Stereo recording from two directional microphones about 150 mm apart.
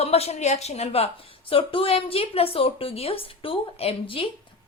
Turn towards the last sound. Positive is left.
turn(degrees=40)  # may be behind; listen again after turning